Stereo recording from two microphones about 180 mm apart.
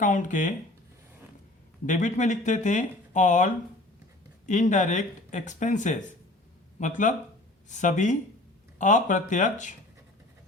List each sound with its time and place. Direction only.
0.0 s speech: 45° left (ahead or behind)
1.9 s speech: 40° left (ahead or behind)